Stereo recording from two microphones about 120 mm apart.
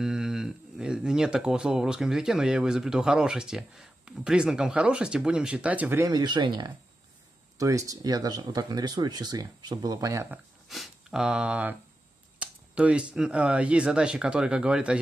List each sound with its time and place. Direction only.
0.0 s speech: 5° right (ahead or behind); by 6.1 s 20° right (ahead or behind)
6.1 s speech: 40° right (ahead or behind)
7.5 s speech: 25° right (ahead or behind)
10.7 s speech: 5° right (ahead or behind)